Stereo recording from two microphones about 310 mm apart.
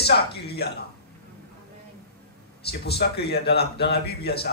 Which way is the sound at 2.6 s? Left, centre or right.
Left.